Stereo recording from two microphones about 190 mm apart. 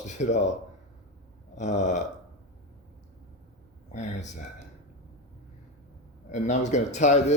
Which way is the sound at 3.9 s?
40° left (ahead or behind).